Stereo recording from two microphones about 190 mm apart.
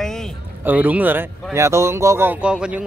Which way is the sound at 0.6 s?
10° right (ahead or behind).